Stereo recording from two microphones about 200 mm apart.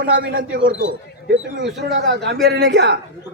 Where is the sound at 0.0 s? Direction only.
50° right (ahead or behind).